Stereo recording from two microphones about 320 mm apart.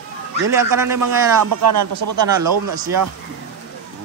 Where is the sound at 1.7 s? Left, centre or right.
Right.